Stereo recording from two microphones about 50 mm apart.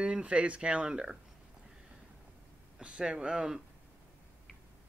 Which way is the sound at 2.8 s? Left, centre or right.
Right.